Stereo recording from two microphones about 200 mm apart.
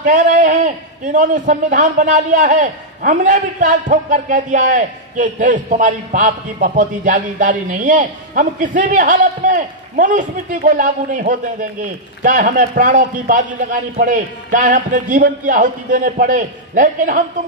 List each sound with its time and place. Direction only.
0.0 s a man's voice: 40° right (ahead or behind)